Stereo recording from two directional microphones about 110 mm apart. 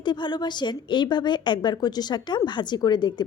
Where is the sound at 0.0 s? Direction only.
45° left (ahead or behind).